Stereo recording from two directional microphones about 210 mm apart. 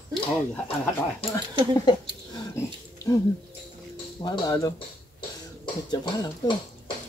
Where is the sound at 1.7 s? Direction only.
20° left (ahead or behind).